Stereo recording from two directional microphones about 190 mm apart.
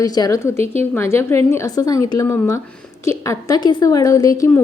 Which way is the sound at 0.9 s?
15° left (ahead or behind).